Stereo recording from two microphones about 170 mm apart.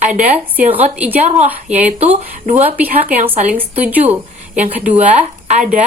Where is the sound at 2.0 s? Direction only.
40° right (ahead or behind).